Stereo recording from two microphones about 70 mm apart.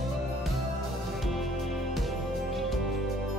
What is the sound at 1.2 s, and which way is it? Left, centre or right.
Music, centre.